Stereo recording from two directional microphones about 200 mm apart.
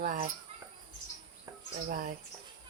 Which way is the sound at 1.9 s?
40° right (ahead or behind).